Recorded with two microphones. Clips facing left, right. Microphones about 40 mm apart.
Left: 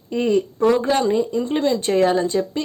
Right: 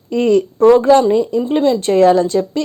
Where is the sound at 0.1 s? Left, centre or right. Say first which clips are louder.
Right 6 dB; right.